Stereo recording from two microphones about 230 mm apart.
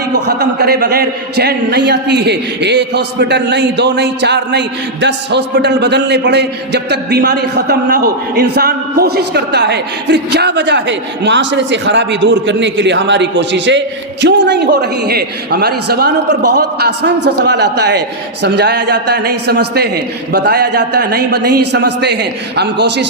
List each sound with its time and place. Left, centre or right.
0.1 s a man's voice: right